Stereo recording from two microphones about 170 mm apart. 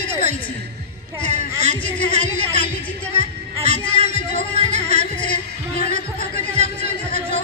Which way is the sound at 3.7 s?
30° left (ahead or behind).